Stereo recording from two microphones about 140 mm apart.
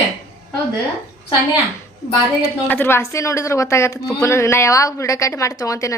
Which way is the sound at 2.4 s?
15° left (ahead or behind).